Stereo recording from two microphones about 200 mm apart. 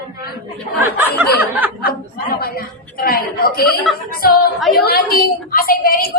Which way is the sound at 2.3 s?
50° left (ahead or behind).